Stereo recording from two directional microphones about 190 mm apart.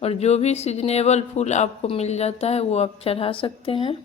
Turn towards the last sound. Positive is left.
turn(degrees=30)  # may be behind; listen again after turning